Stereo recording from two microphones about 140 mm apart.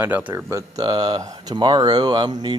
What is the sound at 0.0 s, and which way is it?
Speech, 15° right (ahead or behind).